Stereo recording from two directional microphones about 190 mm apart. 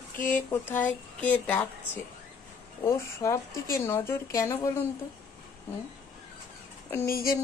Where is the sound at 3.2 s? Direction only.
15° left (ahead or behind).